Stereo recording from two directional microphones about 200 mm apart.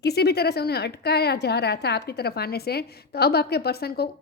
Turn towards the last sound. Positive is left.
turn(degrees=50)  # may be behind; listen again after turning